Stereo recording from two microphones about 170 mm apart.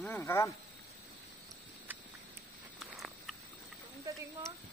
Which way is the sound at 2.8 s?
Centre (ahead or behind).